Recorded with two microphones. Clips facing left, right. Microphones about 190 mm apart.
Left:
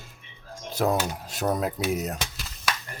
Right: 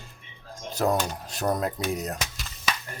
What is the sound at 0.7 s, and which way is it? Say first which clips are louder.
Speech: even; centre (ahead or behind).